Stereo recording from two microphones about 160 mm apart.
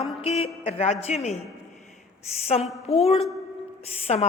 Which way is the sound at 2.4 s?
40° left (ahead or behind).